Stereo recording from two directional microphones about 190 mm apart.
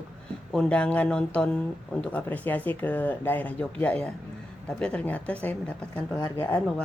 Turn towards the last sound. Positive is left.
turn(degrees=5)  # may be behind; listen again after turning